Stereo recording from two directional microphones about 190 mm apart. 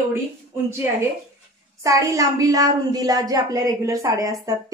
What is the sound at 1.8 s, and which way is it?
A woman's voice, 15° right (ahead or behind).